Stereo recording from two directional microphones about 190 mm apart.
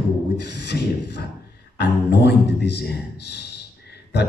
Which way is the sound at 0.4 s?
65° left (ahead or behind).